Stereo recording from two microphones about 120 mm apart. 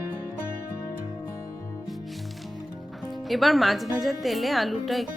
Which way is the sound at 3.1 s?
Centre (ahead or behind).